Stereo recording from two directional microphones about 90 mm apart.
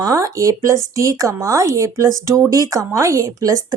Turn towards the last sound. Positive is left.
turn(degrees=-40)  # may be behind; listen again after turning